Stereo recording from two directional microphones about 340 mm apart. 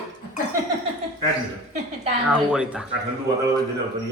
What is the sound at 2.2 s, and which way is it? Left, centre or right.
Speech, centre.